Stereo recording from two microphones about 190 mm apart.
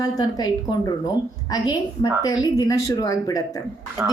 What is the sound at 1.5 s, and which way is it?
A woman's voice, 20° left (ahead or behind).